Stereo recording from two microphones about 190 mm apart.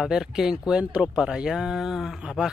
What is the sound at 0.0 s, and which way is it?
Speech, 5° right (ahead or behind).